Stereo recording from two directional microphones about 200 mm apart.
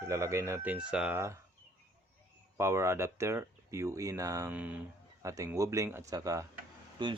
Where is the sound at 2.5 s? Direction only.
15° right (ahead or behind).